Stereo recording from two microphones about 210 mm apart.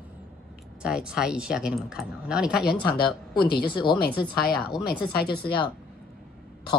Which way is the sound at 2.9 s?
25° left (ahead or behind).